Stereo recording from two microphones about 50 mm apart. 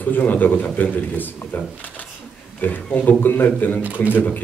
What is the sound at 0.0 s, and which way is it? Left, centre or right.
A man's voice, left.